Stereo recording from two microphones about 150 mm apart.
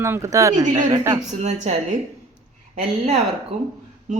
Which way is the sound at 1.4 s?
50° right (ahead or behind).